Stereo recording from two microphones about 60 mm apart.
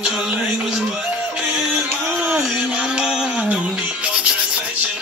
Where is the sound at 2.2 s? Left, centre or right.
Centre.